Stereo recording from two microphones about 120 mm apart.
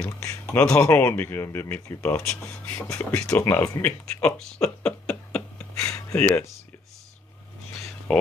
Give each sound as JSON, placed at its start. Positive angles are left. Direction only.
{"t": 0.0, "sound": "speech", "side_deg": 20}
{"t": 3.8, "sound": "a sound", "side_deg": 10}
{"t": 6.2, "sound": "speech", "side_deg": 20}
{"t": 8.1, "sound": "speech", "side_deg": 10}